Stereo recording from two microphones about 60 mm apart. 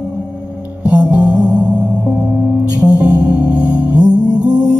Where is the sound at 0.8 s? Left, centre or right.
Right.